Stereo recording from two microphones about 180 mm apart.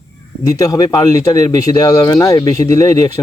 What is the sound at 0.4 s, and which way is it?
Speech, 20° left (ahead or behind).